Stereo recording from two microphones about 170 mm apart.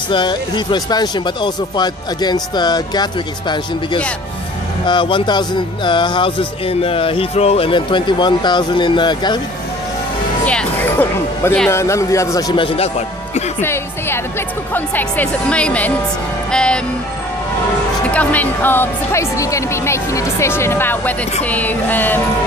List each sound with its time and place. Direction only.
0.1 s speech: 25° left (ahead or behind)
10.4 s speech: 5° left (ahead or behind); by 12.9 s 35° left (ahead or behind)
13.6 s speech: 15° left (ahead or behind)
16.5 s music: 5° left (ahead or behind)
18.1 s speech: 10° left (ahead or behind)